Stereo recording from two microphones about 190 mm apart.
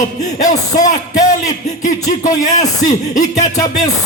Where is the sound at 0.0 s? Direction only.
45° left (ahead or behind).